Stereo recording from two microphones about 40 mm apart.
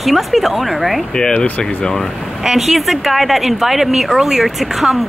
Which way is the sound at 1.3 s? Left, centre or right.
Left.